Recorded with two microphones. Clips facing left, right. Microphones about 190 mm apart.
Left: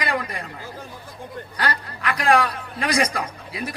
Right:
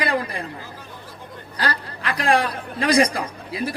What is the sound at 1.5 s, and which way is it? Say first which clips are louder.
A man's voice: right 1 dB; 30° right (ahead or behind).